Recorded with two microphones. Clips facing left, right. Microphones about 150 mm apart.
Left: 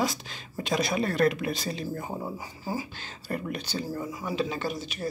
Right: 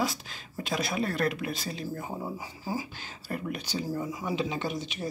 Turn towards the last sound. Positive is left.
turn(degrees=-20)  # may be behind; listen again after turning